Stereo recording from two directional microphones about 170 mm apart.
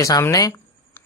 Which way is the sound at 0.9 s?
10° left (ahead or behind).